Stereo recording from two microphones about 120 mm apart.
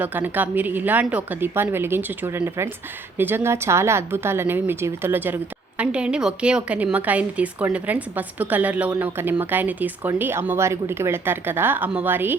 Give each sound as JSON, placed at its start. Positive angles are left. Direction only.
{"t": 0.0, "sound": "a woman's voice", "side_deg": -15}